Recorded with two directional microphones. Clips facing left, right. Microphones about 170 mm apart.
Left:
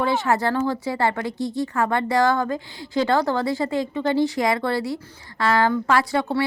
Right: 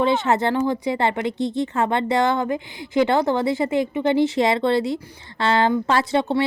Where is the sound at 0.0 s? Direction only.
20° right (ahead or behind).